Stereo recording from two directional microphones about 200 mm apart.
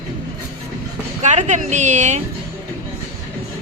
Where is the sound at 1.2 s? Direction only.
35° right (ahead or behind).